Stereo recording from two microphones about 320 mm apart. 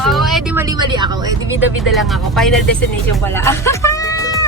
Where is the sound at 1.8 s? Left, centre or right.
Centre.